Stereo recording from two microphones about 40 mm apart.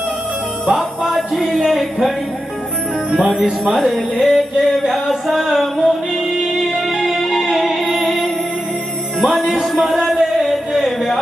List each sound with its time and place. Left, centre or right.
0.7 s music: centre
3.1 s jingle bell: centre
3.6 s music: centre